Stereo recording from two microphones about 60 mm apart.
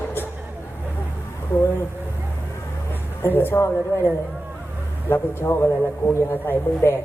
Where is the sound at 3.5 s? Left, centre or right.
Left.